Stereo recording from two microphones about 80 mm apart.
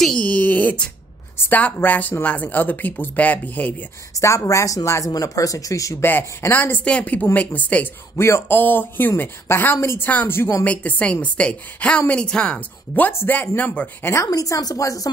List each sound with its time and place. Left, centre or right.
0.2 s a sound: centre
1.4 s speech: left
4.1 s speech: left
6.5 s a woman's voice: left
8.2 s speech: left
10.6 s a woman's voice: centre
14.2 s speech: left